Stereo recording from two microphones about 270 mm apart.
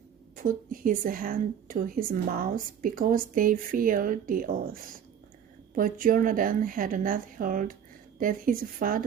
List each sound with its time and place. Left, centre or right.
0.3 s a woman's voice: right